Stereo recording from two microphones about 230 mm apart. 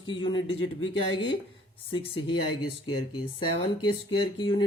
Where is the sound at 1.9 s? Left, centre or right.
Left.